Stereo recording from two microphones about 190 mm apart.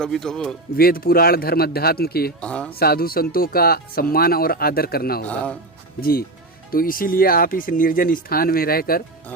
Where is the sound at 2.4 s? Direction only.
5° left (ahead or behind).